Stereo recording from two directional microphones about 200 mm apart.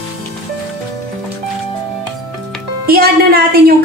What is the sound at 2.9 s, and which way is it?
Speech, 50° right (ahead or behind).